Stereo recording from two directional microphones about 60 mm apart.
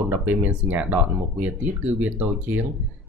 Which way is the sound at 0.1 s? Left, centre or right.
Right.